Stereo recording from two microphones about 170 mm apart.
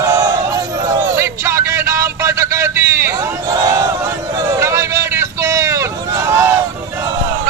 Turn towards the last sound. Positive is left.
turn(degrees=-15)  # may be behind; listen again after turning